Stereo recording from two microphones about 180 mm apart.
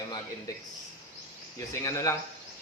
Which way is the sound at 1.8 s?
15° left (ahead or behind).